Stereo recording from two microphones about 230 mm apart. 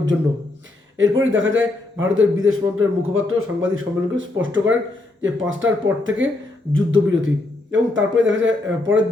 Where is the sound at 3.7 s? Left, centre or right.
Right.